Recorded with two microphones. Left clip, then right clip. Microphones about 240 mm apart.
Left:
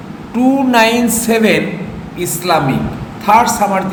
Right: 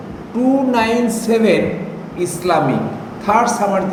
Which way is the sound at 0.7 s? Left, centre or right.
Left.